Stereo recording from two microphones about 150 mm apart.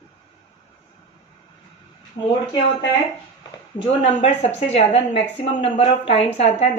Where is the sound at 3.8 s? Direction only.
35° left (ahead or behind).